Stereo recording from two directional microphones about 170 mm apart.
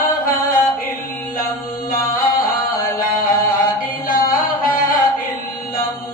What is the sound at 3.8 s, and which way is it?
Music, 55° left (ahead or behind).